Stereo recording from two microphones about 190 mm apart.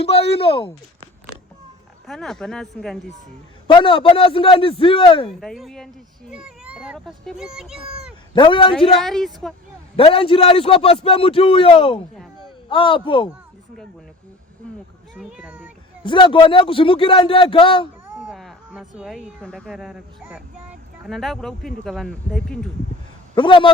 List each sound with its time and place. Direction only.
0.0 s speech: 30° left (ahead or behind)
2.0 s speech: centre (ahead or behind)
3.7 s a man's voice: 25° left (ahead or behind)
5.4 s speech: centre (ahead or behind)
8.4 s a man's voice: 25° left (ahead or behind)
9.0 s speech: centre (ahead or behind)
9.9 s a man's voice: 30° left (ahead or behind)
15.1 s speech: 5° right (ahead or behind)
16.0 s a man's voice: 25° left (ahead or behind)
18.0 s speech: 5° right (ahead or behind)
23.3 s a man's voice: 25° left (ahead or behind)